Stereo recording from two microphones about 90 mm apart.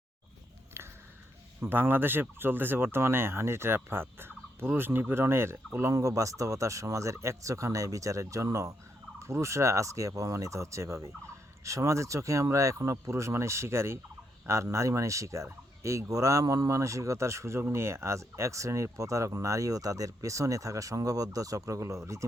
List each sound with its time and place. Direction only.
1.6 s speech: 25° right (ahead or behind)